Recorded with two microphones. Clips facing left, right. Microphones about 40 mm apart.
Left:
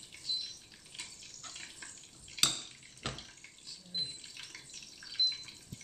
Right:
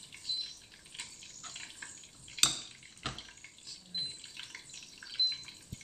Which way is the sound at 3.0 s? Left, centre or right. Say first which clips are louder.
Even; centre.